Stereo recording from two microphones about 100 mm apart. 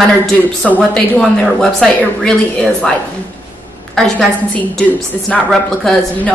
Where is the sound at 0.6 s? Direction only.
Centre (ahead or behind).